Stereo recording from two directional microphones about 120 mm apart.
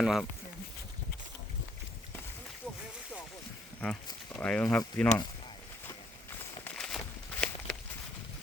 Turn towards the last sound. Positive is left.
turn(degrees=10)  # may be behind; listen again after turning